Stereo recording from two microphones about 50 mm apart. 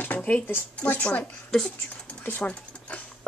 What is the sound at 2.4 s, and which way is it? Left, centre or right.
Dog, left.